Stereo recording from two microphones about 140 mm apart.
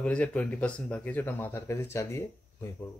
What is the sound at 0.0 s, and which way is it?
Speech, 10° left (ahead or behind).